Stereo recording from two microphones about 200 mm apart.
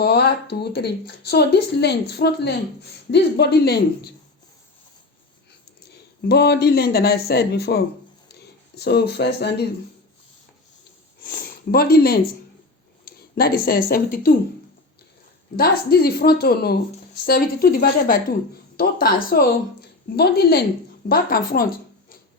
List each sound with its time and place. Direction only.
0.0 s speech: 55° left (ahead or behind)
5.9 s speech: 55° left (ahead or behind)
11.2 s speech: 45° left (ahead or behind)
15.5 s speech: 50° left (ahead or behind)